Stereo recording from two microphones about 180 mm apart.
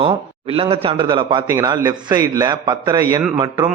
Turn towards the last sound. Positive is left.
turn(degrees=-25)  # may be behind; listen again after turning